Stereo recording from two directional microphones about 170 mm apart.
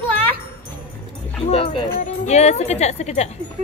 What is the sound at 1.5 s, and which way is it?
Speech, 30° left (ahead or behind).